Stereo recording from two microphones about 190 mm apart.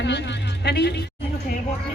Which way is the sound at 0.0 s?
65° left (ahead or behind).